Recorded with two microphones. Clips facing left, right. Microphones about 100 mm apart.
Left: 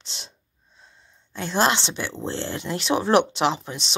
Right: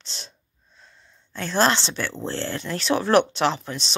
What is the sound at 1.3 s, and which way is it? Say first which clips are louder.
Speech: right 1 dB; 15° left (ahead or behind).